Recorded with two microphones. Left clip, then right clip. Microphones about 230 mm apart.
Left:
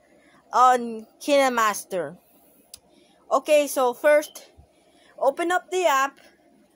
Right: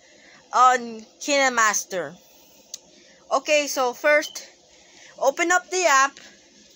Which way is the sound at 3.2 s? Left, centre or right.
Left.